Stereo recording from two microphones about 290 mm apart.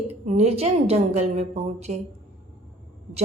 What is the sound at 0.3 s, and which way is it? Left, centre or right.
A woman's voice, right.